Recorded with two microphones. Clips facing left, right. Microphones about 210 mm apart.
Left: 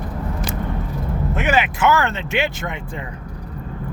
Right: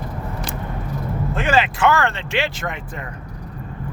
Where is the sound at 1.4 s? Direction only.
20° left (ahead or behind).